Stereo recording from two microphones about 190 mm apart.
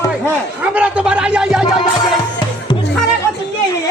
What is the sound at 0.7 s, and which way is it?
Speech, 5° right (ahead or behind).